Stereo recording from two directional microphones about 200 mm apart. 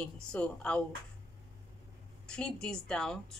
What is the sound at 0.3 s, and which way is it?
Speech, 5° left (ahead or behind).